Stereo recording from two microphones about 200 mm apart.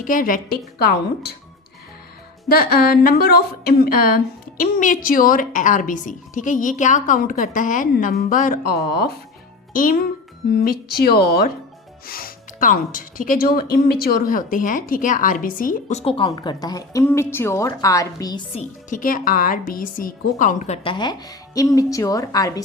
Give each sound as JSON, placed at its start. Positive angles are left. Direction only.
{"t": 0.0, "sound": "a woman's voice", "side_deg": 45}
{"t": 2.5, "sound": "a woman's voice", "side_deg": 50}
{"t": 18.5, "sound": "a woman's voice", "side_deg": 40}
{"t": 20.8, "sound": "a woman's voice", "side_deg": 20}